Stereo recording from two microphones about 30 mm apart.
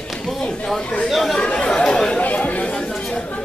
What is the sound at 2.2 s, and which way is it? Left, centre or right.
Chatter, left.